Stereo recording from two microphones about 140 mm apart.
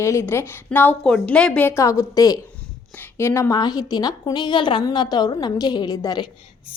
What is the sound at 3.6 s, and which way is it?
A woman's voice, 30° left (ahead or behind).